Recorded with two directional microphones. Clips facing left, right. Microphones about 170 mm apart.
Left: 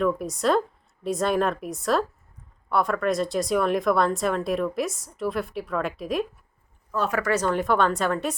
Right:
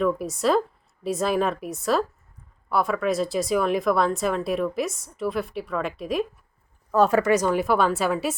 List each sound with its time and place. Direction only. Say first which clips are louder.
0.0 s speech: right 1 dB; centre (ahead or behind)
6.9 s speech: right 7 dB; 40° right (ahead or behind)
7.2 s a woman's voice: right 3 dB; 15° right (ahead or behind)